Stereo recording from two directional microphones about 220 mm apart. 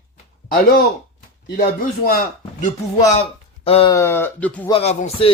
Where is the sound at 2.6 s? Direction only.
30° left (ahead or behind).